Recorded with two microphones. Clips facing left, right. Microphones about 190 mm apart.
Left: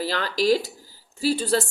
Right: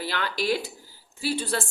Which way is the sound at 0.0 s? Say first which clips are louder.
Left 5 dB; 40° left (ahead or behind).